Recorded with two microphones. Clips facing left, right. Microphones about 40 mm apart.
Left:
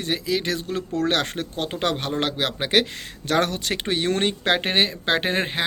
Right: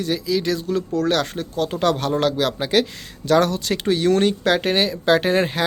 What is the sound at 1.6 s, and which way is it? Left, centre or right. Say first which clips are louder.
Speech: right 5 dB; left.